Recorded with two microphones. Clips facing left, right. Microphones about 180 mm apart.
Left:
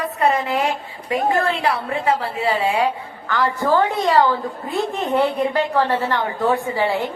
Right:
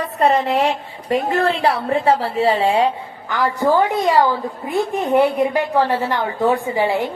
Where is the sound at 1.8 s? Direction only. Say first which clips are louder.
Right 4 dB; 35° right (ahead or behind).